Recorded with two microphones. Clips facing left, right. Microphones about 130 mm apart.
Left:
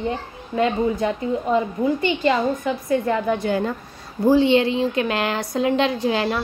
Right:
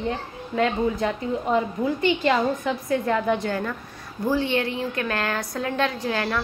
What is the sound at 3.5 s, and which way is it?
A woman's voice, 25° left (ahead or behind).